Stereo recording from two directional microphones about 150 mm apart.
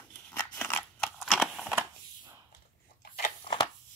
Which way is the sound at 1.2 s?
Centre (ahead or behind).